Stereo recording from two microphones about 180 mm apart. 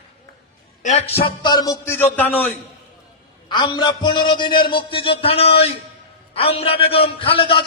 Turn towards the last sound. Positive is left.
turn(degrees=30)  # may be behind; listen again after turning